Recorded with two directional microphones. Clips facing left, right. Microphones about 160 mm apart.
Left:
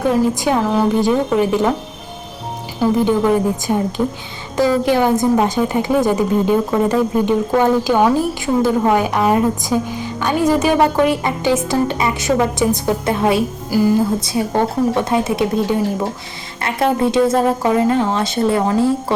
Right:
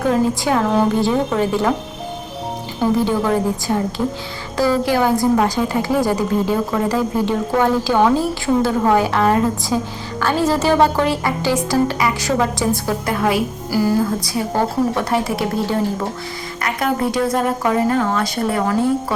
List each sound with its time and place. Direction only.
0.4 s a woman's voice: 10° left (ahead or behind)
3.0 s a woman's voice: 15° left (ahead or behind)